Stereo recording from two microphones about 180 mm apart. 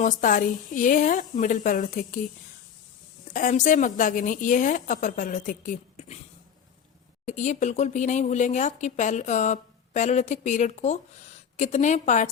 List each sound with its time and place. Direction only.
0.0 s a woman's voice: 45° left (ahead or behind)
3.3 s a woman's voice: 45° left (ahead or behind)
7.3 s speech: 40° left (ahead or behind)